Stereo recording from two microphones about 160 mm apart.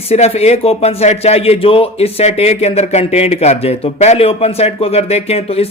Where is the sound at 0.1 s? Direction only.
40° left (ahead or behind).